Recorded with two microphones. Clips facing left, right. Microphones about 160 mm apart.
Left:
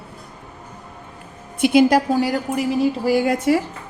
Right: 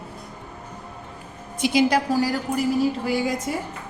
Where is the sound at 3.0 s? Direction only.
45° left (ahead or behind).